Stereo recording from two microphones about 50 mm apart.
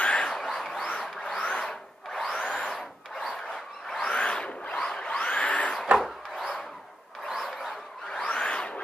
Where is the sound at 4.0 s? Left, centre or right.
Centre.